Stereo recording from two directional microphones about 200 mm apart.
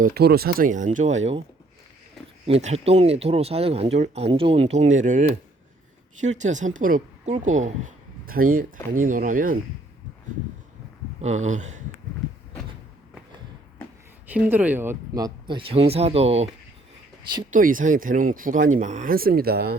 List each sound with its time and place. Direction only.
0.0 s speech: 50° right (ahead or behind)
2.5 s a woman's voice: 35° right (ahead or behind)
11.4 s speech: 35° right (ahead or behind)
14.3 s speech: 10° right (ahead or behind); by 16.5 s 30° right (ahead or behind)
17.5 s speech: 40° right (ahead or behind)